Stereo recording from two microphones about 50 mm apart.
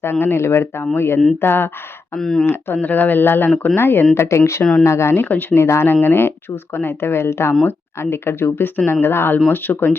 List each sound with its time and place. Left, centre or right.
0.0 s speech: left
2.1 s speech: centre
2.7 s speech: left
4.1 s speech: left
5.1 s speech: left
5.5 s speech: left
5.9 s speech: left